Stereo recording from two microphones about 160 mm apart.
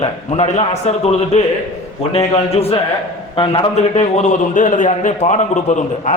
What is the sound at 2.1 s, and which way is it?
A man's voice, 40° left (ahead or behind).